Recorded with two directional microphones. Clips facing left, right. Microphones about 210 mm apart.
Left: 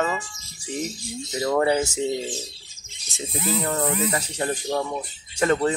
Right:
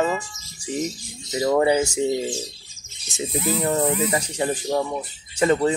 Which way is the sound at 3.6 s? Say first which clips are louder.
Right 5 dB; 15° right (ahead or behind).